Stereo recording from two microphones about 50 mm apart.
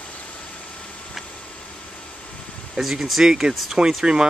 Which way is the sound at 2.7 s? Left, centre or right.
Centre.